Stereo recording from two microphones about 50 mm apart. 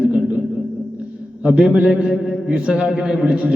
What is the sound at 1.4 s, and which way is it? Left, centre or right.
Mantra, right.